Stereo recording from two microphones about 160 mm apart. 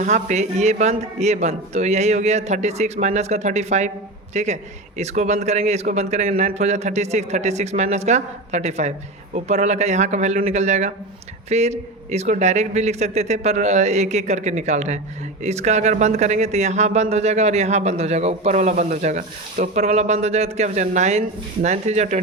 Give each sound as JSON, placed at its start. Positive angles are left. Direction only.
{"t": 0.0, "sound": "speech", "side_deg": -50}